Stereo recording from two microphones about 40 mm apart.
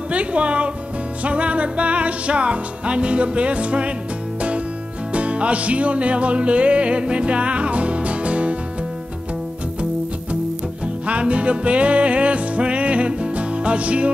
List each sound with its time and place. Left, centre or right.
0.1 s music: right
5.1 s music: right
11.1 s music: right